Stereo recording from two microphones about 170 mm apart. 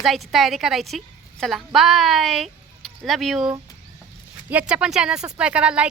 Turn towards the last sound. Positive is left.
turn(degrees=-5)  # may be behind; listen again after turning